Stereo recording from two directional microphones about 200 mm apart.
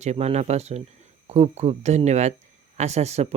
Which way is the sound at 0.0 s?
35° right (ahead or behind).